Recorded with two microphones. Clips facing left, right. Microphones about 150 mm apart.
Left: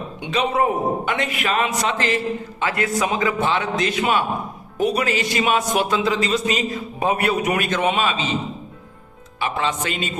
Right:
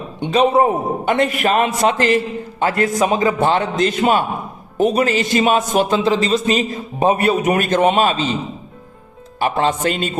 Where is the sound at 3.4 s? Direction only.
45° right (ahead or behind).